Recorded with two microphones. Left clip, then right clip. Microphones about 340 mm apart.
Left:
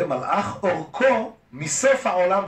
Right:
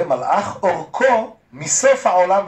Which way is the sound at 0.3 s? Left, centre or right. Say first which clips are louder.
Right 5 dB; centre.